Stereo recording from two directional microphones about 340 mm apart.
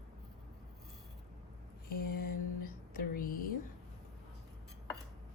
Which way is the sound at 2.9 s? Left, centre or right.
Left.